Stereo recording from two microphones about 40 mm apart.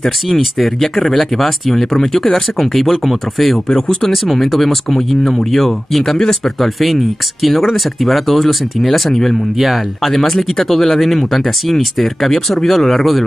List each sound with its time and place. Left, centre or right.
0.0 s speech: centre
3.6 s speech: centre
4.1 s speech: centre